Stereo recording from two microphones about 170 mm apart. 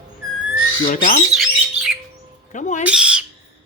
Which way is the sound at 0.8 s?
50° left (ahead or behind).